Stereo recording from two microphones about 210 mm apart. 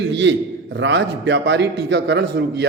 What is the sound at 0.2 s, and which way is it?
A man's voice, 60° right (ahead or behind).